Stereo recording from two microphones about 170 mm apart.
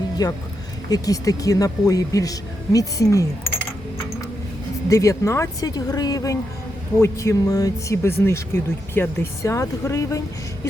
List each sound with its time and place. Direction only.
0.2 s a woman's voice: 20° left (ahead or behind)
4.9 s a woman's voice: 20° left (ahead or behind)